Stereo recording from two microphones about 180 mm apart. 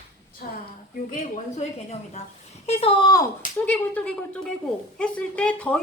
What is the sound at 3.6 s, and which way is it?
A woman's voice, 5° left (ahead or behind).